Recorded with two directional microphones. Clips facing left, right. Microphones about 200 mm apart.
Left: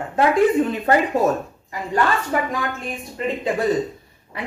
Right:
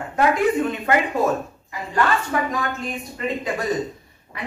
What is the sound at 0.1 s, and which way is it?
Speech, 30° left (ahead or behind).